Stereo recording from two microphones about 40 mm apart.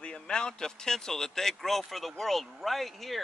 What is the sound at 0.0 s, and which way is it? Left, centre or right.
A woman's voice, left.